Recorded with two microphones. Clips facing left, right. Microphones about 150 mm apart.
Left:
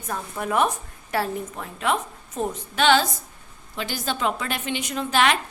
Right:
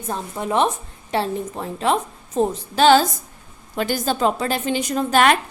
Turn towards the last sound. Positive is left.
turn(degrees=-45)  # may be behind; listen again after turning